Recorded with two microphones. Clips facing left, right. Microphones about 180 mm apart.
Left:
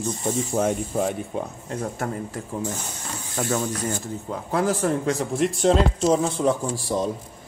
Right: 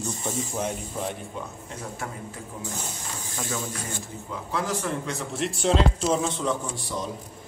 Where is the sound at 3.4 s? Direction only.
45° left (ahead or behind).